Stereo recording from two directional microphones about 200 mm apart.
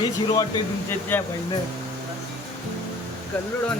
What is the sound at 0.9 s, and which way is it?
Speech, 10° left (ahead or behind).